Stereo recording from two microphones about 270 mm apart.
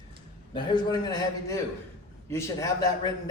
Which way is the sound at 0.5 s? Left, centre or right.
Centre.